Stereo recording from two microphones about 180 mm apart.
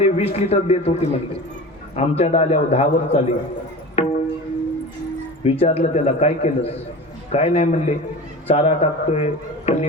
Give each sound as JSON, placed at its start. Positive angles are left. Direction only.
{"t": 0.0, "sound": "a man's voice", "side_deg": 35}
{"t": 4.0, "sound": "music", "side_deg": 35}
{"t": 5.4, "sound": "a man's voice", "side_deg": 35}